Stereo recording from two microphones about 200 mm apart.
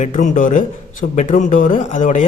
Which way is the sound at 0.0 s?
40° left (ahead or behind).